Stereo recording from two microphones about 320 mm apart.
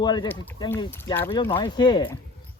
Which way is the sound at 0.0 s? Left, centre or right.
Centre.